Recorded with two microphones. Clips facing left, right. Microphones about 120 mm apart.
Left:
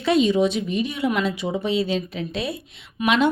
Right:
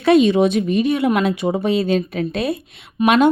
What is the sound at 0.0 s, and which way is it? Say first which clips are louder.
A woman's voice: right 5 dB; 60° right (ahead or behind).